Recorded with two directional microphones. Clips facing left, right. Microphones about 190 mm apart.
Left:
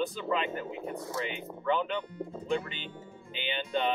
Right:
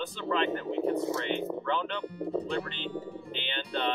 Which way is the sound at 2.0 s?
35° right (ahead or behind).